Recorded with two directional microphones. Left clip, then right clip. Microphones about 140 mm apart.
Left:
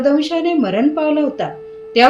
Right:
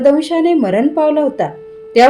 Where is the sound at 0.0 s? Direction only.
35° right (ahead or behind).